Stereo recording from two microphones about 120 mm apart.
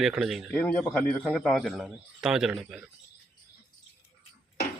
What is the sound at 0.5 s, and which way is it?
A man's voice, 15° left (ahead or behind).